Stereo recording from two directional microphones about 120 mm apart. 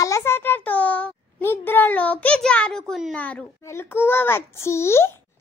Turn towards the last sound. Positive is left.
turn(degrees=20)  # may be behind; listen again after turning